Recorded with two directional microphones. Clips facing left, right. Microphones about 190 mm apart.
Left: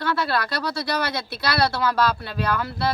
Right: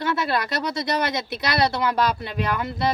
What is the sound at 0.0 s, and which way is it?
Speech, 20° right (ahead or behind).